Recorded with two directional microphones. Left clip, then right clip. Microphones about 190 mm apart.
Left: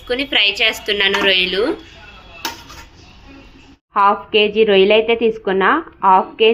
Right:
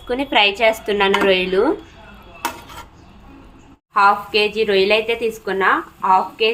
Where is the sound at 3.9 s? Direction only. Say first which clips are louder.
Left 1 dB; 30° left (ahead or behind).